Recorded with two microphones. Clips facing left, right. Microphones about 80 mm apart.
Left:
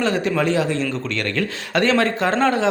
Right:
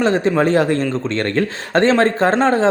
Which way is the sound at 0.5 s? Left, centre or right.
Right.